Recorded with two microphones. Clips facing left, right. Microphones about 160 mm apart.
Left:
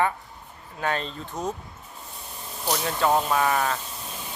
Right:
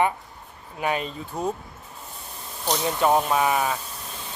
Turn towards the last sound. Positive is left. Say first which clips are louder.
# right 1 dB
turn(degrees=-10)  # may be behind; listen again after turning